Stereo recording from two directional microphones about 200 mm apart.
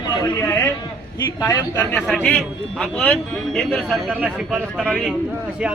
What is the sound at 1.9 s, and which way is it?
A man's voice, 5° left (ahead or behind).